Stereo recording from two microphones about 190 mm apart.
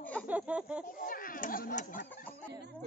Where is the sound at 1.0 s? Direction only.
45° left (ahead or behind).